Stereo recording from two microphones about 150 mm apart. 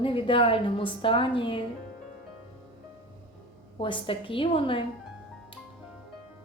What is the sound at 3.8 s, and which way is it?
A woman's voice, 35° left (ahead or behind).